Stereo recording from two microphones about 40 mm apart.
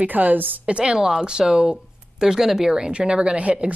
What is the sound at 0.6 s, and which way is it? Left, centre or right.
Speech, right.